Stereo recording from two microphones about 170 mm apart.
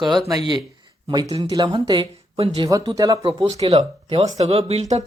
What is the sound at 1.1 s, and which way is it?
Speech, 20° right (ahead or behind).